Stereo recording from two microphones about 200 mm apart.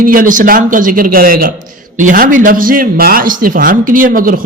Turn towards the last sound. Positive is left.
turn(degrees=-45)  # may be behind; listen again after turning